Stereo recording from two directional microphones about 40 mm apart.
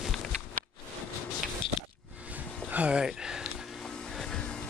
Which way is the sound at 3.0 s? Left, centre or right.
Centre.